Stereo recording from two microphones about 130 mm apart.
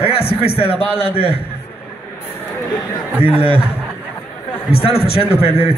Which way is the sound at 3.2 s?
45° left (ahead or behind).